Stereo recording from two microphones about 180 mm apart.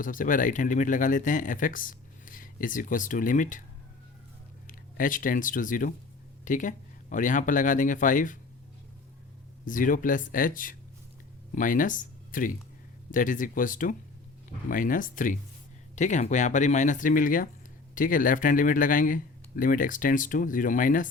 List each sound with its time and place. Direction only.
0.0 s speech: 50° left (ahead or behind)
4.6 s speech: 50° left (ahead or behind)
9.6 s speech: 50° left (ahead or behind)